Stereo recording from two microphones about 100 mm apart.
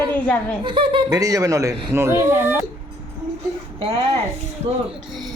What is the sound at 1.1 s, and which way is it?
Speech, 35° right (ahead or behind).